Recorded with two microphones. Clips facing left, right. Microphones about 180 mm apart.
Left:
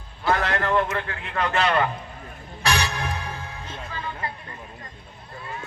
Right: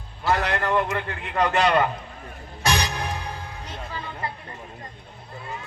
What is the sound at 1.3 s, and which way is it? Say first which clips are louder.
Speech: right 3 dB; 15° right (ahead or behind).